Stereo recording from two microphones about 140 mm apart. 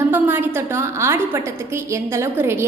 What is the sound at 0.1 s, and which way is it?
A woman's voice, 15° right (ahead or behind).